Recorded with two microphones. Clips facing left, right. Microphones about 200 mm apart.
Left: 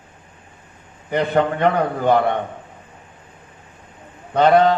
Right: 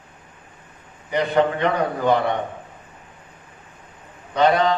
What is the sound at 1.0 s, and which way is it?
Mantra, 55° left (ahead or behind).